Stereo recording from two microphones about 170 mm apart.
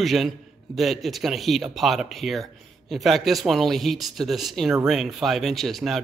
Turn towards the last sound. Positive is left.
turn(degrees=0)  # may be behind; listen again after turning